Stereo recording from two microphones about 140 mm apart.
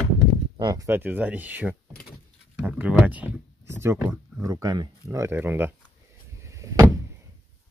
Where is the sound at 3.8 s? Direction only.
20° right (ahead or behind).